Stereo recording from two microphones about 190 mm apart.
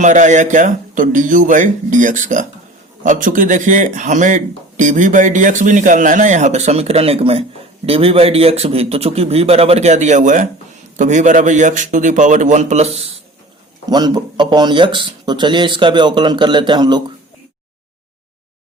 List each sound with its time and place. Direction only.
0.0 s speech: 40° right (ahead or behind)
13.9 s speech: 20° right (ahead or behind)